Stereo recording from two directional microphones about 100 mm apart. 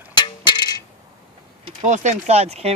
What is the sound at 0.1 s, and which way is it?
Coin, 50° left (ahead or behind).